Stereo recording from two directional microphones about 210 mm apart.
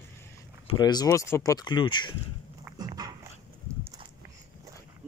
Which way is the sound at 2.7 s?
20° right (ahead or behind).